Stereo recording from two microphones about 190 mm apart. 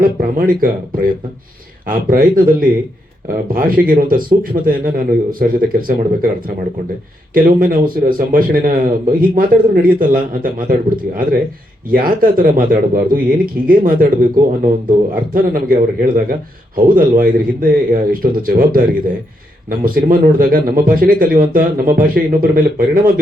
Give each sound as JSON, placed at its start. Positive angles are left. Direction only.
{"t": 0.0, "sound": "a man's voice", "side_deg": -45}